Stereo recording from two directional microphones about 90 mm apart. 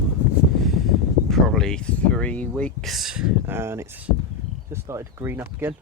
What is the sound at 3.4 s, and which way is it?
Speech, 25° right (ahead or behind).